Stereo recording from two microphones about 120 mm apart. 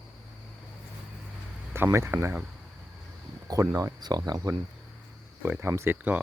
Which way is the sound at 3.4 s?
30° right (ahead or behind).